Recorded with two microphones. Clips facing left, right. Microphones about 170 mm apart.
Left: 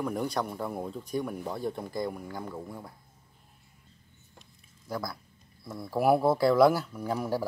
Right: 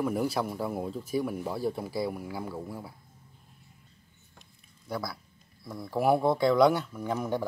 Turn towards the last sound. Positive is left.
turn(degrees=0)  # may be behind; listen again after turning